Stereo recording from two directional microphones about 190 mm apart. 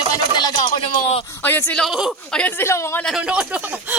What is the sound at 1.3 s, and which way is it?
A man's voice, 10° left (ahead or behind).